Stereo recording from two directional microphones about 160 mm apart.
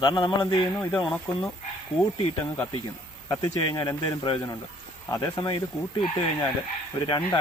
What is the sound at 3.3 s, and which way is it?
Speech, 25° left (ahead or behind).